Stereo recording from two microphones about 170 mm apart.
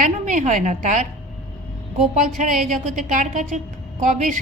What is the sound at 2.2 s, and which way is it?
A woman's voice, 50° right (ahead or behind).